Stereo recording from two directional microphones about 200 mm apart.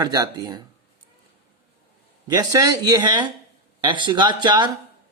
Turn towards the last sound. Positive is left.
turn(degrees=-20)  # may be behind; listen again after turning